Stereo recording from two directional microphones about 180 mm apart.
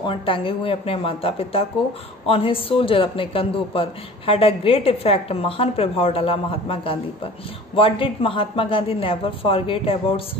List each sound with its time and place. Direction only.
0.0 s a woman's voice: 30° left (ahead or behind)